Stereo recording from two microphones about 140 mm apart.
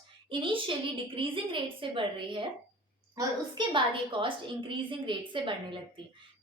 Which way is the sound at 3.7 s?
35° right (ahead or behind).